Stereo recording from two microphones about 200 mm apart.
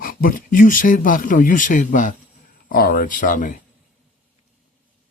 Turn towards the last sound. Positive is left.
turn(degrees=40)  # may be behind; listen again after turning